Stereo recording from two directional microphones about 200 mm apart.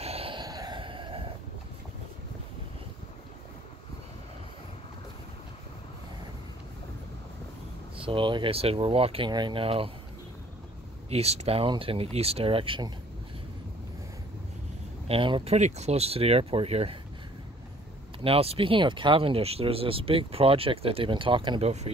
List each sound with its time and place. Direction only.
0.0 s vehicle: 30° right (ahead or behind)
8.0 s speech: 25° right (ahead or behind)
11.1 s speech: 30° right (ahead or behind)
15.0 s speech: 25° right (ahead or behind)
18.2 s speech: 30° right (ahead or behind)